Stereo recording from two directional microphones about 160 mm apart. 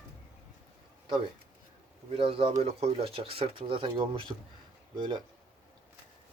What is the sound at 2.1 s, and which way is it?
Speech, 35° right (ahead or behind).